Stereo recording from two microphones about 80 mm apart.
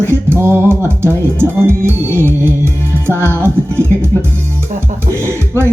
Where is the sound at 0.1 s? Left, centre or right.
Right.